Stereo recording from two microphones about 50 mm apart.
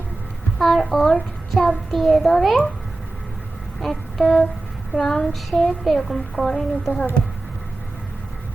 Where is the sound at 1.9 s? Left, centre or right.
Centre.